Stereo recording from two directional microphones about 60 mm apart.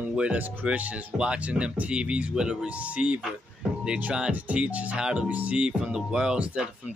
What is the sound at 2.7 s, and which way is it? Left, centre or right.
Speech, right.